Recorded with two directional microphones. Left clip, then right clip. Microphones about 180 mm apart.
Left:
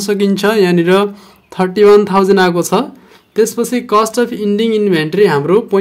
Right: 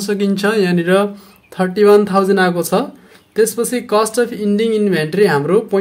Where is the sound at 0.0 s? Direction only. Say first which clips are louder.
Left 4 dB; 35° left (ahead or behind).